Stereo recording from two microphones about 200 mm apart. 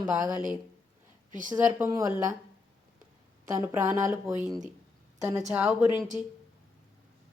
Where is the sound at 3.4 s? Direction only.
10° right (ahead or behind).